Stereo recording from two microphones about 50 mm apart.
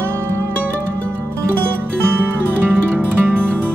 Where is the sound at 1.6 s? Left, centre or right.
Right.